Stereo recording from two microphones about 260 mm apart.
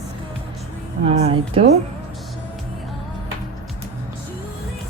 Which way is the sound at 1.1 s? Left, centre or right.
Right.